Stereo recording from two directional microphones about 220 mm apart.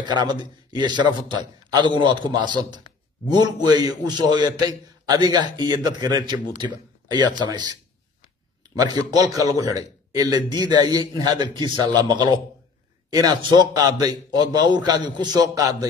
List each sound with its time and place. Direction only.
0.0 s a man's voice: 20° right (ahead or behind)
8.7 s a man's voice: 15° right (ahead or behind)